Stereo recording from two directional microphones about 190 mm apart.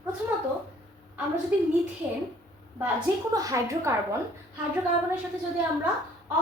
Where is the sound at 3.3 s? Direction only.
15° right (ahead or behind).